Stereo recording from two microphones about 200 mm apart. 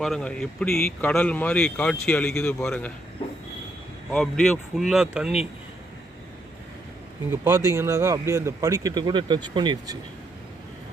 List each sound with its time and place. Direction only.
0.0 s speech: centre (ahead or behind)
4.1 s speech: 5° left (ahead or behind)
7.3 s speech: 10° right (ahead or behind)